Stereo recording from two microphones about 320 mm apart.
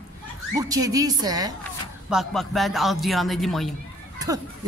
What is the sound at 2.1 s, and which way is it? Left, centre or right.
A man's voice, centre.